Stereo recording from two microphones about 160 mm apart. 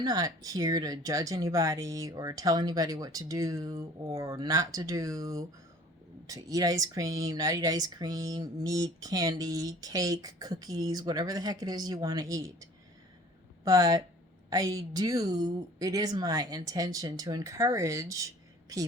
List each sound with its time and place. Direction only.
0.0 s speech: 25° right (ahead or behind)
13.7 s speech: 20° right (ahead or behind)